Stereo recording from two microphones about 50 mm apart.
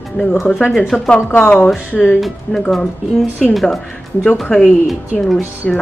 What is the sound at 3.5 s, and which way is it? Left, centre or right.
Speech, centre.